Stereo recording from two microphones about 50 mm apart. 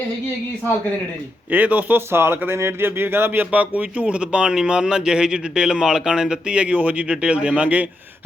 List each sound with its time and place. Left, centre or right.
1.5 s speech: right
2.1 s speech: right
3.5 s speech: right